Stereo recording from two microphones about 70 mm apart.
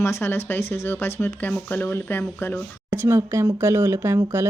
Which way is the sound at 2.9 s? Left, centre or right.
Right.